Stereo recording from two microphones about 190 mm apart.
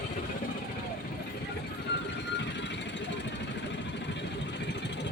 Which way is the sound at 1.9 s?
65° left (ahead or behind).